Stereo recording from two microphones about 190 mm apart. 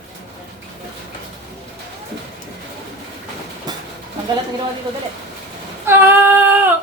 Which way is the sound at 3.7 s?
20° right (ahead or behind).